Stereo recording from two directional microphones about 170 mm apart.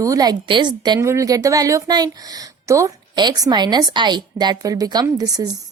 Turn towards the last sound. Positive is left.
turn(degrees=-20)  # may be behind; listen again after turning